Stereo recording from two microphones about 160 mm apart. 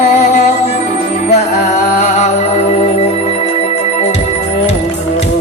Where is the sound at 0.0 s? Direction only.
45° left (ahead or behind).